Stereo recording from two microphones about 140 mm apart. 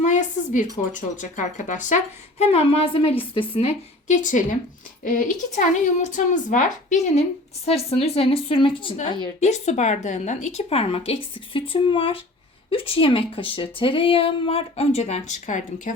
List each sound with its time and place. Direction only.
0.0 s a sound: 60° left (ahead or behind)
0.9 s speech: 65° left (ahead or behind)
2.4 s a woman's voice: 45° left (ahead or behind)
9.4 s a woman's voice: 55° left (ahead or behind)